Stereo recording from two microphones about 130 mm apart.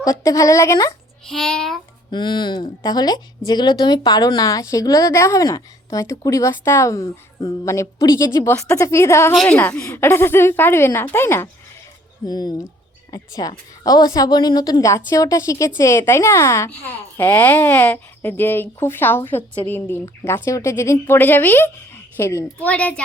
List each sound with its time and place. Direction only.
0.0 s a woman's voice: 25° left (ahead or behind)
1.3 s a child's voice: 5° left (ahead or behind)
2.0 s a woman's voice: 35° left (ahead or behind)
9.3 s a child's voice: centre (ahead or behind)
9.6 s a child's voice: 15° left (ahead or behind)
12.2 s a woman's voice: 30° left (ahead or behind)
22.6 s a child's voice: 10° left (ahead or behind)